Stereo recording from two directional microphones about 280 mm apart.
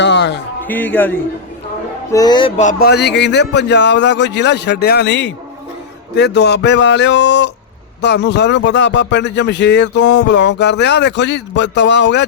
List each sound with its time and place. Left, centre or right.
0.0 s a sound: left
0.7 s a man's voice: centre
2.1 s speech: centre; by 12.2 s left